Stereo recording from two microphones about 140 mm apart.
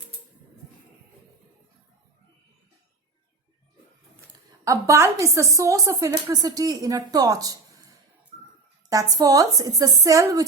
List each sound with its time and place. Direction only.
4.6 s a woman's voice: 20° right (ahead or behind)